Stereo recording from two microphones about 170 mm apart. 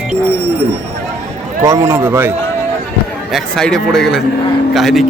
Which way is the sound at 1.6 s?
20° right (ahead or behind).